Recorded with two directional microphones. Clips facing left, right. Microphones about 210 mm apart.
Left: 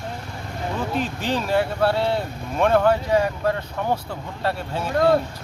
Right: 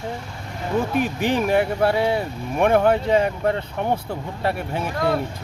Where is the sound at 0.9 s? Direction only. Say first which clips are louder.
Right 2 dB; 15° right (ahead or behind).